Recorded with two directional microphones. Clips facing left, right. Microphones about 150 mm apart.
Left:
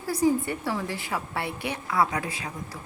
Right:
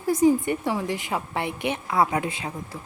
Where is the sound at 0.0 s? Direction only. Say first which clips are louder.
Right 4 dB; 20° right (ahead or behind).